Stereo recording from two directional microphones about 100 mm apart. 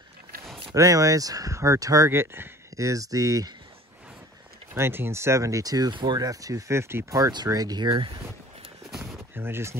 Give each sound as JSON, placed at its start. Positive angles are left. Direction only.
{"t": 0.7, "sound": "speech", "side_deg": -35}
{"t": 4.7, "sound": "speech", "side_deg": -25}
{"t": 7.2, "sound": "speech", "side_deg": -40}
{"t": 8.9, "sound": "a sound", "side_deg": 0}
{"t": 9.3, "sound": "speech", "side_deg": -20}